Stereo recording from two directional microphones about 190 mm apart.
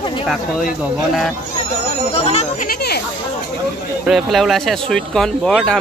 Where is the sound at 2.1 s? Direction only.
35° left (ahead or behind).